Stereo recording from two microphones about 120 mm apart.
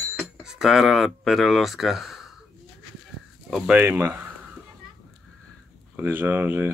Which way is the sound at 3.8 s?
15° right (ahead or behind).